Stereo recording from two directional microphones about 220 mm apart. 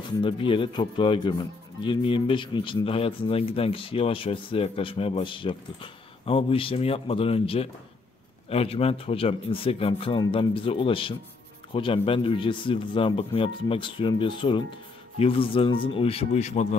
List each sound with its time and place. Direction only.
0.2 s a man's voice: 25° left (ahead or behind)